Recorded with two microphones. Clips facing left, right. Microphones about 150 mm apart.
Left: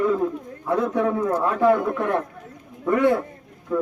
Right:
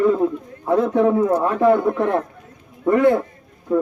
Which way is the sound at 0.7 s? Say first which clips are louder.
Right 5 dB; 25° right (ahead or behind).